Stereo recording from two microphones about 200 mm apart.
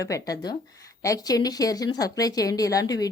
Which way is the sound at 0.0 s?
15° left (ahead or behind).